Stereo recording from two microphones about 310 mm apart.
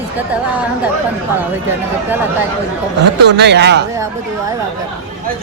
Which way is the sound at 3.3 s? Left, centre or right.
Right.